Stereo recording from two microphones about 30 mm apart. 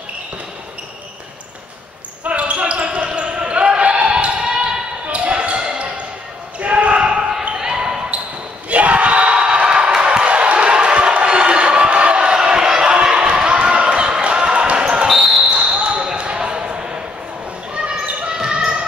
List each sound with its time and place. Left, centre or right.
2.2 s basketball bounce: right
4.4 s basketball bounce: right
5.1 s basketball bounce: right
6.6 s basketball bounce: right
8.6 s crowd: right
12.5 s a sound: right
14.7 s basketball bounce: right
15.0 s basketball bounce: centre
15.5 s basketball bounce: right